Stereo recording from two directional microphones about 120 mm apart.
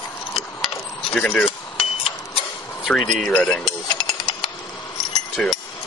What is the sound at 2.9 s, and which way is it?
Speech, 5° left (ahead or behind).